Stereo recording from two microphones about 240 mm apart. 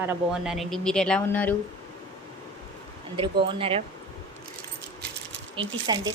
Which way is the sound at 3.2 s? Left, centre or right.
Right.